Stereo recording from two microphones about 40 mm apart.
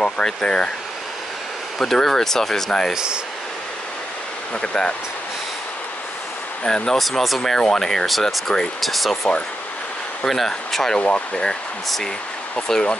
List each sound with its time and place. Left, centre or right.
0.0 s speech: left
1.8 s speech: centre
4.6 s speech: centre
6.6 s speech: centre
7.0 s speech: centre
7.5 s speech: centre
11.0 s speech: left
12.5 s speech: centre